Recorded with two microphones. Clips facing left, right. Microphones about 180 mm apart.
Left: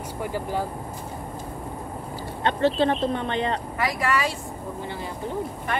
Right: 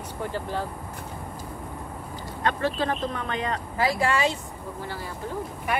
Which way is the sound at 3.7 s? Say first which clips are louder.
Right 4 dB; 30° right (ahead or behind).